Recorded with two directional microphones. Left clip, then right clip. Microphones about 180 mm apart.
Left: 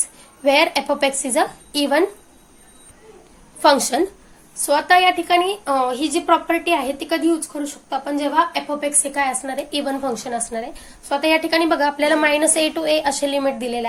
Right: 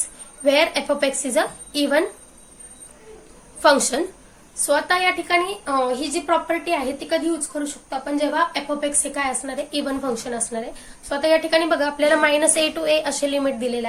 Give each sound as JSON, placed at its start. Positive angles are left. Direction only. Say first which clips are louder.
{"t": 0.4, "sound": "speech", "louder": "left 2 dB", "side_deg": 30}
{"t": 3.6, "sound": "a woman's voice", "louder": "left 2 dB", "side_deg": 30}